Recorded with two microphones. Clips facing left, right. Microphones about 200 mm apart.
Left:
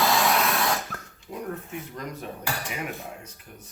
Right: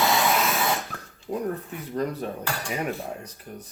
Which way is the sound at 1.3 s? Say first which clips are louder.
Right 7 dB; 40° right (ahead or behind).